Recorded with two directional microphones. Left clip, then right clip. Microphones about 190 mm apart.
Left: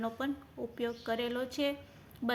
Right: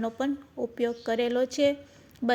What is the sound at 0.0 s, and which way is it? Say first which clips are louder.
A woman's voice: right 6 dB; 30° right (ahead or behind).